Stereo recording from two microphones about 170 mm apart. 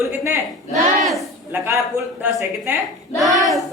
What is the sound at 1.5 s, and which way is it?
Speech, 15° right (ahead or behind).